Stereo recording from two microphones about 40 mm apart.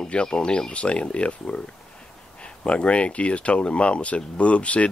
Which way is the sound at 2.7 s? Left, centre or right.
Left.